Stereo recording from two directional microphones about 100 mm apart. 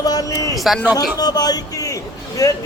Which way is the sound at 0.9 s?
40° left (ahead or behind).